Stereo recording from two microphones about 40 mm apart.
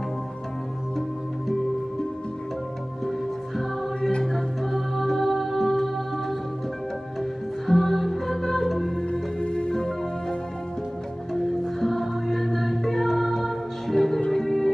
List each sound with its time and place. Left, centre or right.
3.1 s music: centre
4.6 s music: centre
9.4 s music: left
9.7 s music: centre
11.3 s music: centre